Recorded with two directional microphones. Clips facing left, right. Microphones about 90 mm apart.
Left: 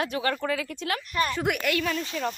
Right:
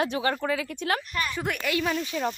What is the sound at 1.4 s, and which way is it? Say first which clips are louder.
Speech: left 3 dB; 5° left (ahead or behind).